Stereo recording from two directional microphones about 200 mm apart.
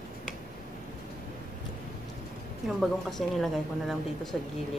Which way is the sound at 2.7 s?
Centre (ahead or behind).